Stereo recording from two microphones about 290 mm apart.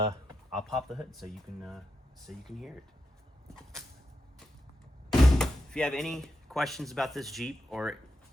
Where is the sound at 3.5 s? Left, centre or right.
Centre.